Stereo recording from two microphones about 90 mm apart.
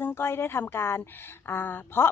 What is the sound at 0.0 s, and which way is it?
A woman's voice, 25° left (ahead or behind).